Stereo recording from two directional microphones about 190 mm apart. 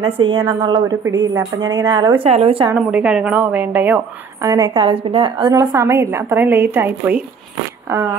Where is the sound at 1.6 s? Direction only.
20° right (ahead or behind).